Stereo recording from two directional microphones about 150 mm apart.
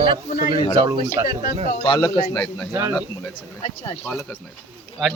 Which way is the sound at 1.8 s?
30° left (ahead or behind).